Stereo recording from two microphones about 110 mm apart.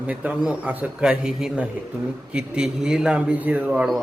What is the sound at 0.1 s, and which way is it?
A man's voice, 15° right (ahead or behind).